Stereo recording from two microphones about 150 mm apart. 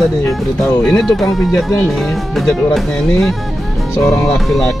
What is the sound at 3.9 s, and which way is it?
Speech, 20° left (ahead or behind).